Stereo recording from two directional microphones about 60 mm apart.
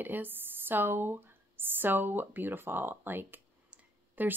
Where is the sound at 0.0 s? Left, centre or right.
Right.